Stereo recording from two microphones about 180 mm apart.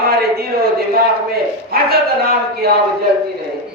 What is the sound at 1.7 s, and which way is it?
Bow-wow, 55° right (ahead or behind).